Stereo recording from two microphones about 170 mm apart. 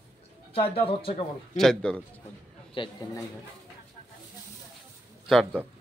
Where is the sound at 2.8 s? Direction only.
30° left (ahead or behind).